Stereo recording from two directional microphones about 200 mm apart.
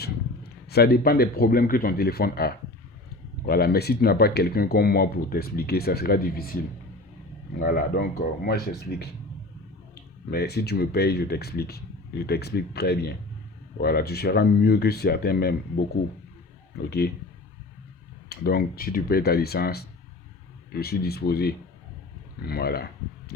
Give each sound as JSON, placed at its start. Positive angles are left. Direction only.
{"t": 0.0, "sound": "speech", "side_deg": 50}
{"t": 7.6, "sound": "speech", "side_deg": 45}
{"t": 18.3, "sound": "speech", "side_deg": 50}